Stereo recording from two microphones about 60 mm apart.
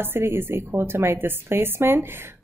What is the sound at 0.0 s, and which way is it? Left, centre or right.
A woman's voice, right.